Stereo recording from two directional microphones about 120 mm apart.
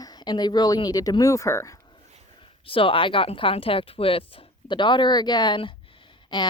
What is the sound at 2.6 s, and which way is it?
Speech, 50° left (ahead or behind).